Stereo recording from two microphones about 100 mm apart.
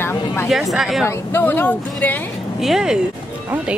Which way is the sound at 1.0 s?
25° left (ahead or behind).